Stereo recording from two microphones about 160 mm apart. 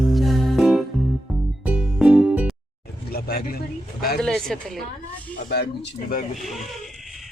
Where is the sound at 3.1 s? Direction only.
75° left (ahead or behind).